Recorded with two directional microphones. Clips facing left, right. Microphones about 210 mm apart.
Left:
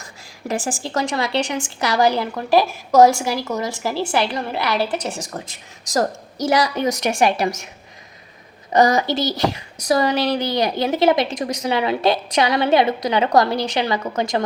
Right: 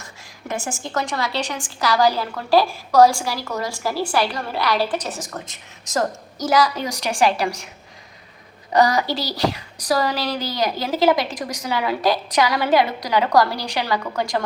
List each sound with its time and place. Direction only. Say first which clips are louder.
0.4 s a woman's voice: left 4 dB; 30° left (ahead or behind)
8.7 s a woman's voice: left 2 dB; 25° left (ahead or behind)